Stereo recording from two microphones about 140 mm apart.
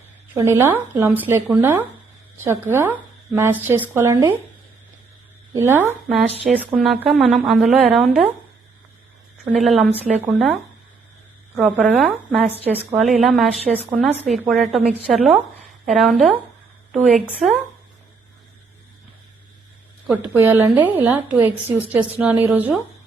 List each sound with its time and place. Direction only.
0.3 s a woman's voice: 20° right (ahead or behind)
5.5 s a woman's voice: 15° right (ahead or behind)
6.7 s speech: centre (ahead or behind)
9.4 s speech: centre (ahead or behind)
11.6 s speech: centre (ahead or behind)
20.3 s a woman's voice: 20° right (ahead or behind)